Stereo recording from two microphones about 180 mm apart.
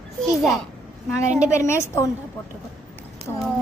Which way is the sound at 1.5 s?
15° left (ahead or behind).